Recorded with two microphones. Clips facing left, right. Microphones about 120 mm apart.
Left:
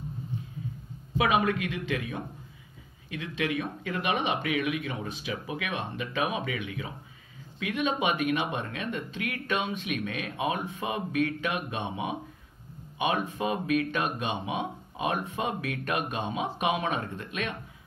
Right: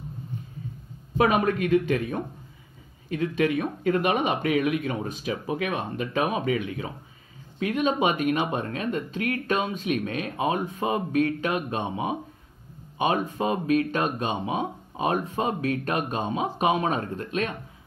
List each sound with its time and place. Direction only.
1.1 s speech: 45° right (ahead or behind)